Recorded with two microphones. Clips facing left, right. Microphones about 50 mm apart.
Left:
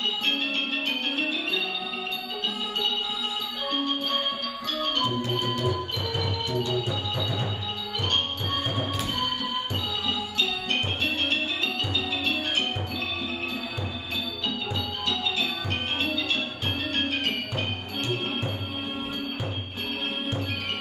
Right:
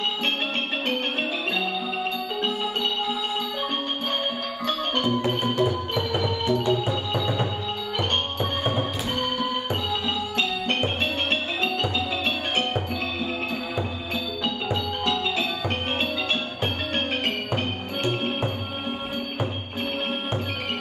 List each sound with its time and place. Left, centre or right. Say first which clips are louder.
5.2 s organ: right 4 dB; right
10.3 s music: right 3 dB; right
14.7 s music: right 4 dB; right